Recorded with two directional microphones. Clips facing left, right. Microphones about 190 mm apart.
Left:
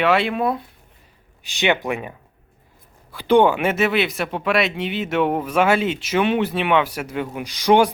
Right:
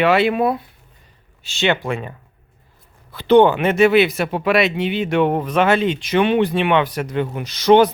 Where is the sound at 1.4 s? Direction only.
15° left (ahead or behind).